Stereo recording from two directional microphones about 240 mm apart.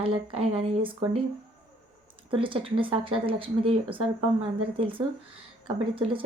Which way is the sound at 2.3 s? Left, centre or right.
Right.